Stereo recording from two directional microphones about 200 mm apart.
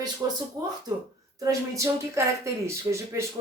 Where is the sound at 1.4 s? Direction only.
15° right (ahead or behind).